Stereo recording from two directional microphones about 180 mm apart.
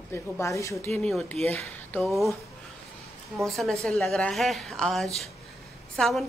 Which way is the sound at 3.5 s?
Centre (ahead or behind).